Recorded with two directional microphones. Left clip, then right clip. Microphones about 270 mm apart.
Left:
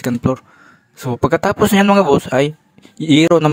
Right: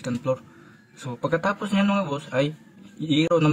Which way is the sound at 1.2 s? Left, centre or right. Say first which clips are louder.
Left 10 dB; left.